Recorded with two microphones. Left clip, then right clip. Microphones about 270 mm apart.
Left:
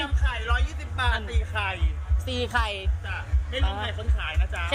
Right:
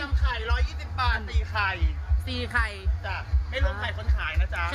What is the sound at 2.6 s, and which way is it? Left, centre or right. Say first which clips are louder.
Speech: left 1 dB; right.